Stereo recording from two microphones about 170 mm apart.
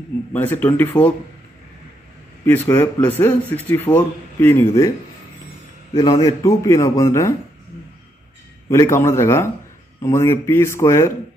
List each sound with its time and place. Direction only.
0.3 s a man's voice: 10° left (ahead or behind)
2.4 s a man's voice: 10° left (ahead or behind)
5.9 s a man's voice: 20° left (ahead or behind)
8.6 s a man's voice: 15° left (ahead or behind)